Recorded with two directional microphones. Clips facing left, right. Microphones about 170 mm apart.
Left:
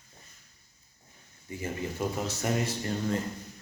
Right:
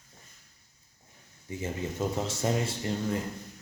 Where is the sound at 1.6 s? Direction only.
20° right (ahead or behind).